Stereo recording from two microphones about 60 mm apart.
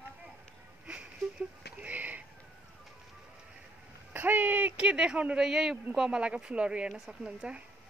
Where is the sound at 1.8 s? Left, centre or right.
Right.